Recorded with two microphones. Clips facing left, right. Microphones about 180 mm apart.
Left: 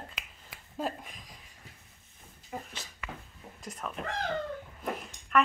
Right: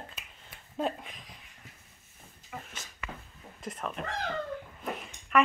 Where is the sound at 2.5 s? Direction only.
35° left (ahead or behind).